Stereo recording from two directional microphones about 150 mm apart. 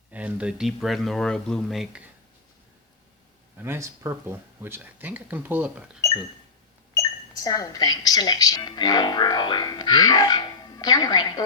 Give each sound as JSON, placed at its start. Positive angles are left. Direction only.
{"t": 0.1, "sound": "speech", "side_deg": -10}
{"t": 3.6, "sound": "speech", "side_deg": -20}
{"t": 7.4, "sound": "speech", "side_deg": 25}